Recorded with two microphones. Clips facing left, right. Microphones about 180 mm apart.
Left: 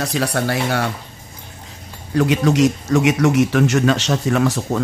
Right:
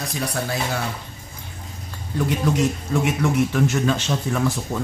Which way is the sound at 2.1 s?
85° left.